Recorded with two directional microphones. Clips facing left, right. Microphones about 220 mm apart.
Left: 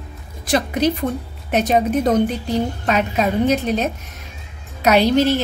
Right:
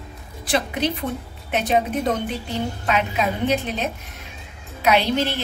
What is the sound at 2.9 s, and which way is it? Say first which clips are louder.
A woman's voice: left 3 dB; 40° left (ahead or behind).